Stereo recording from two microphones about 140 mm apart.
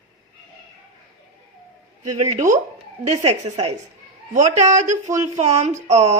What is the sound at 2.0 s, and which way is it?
Speech, 60° right (ahead or behind).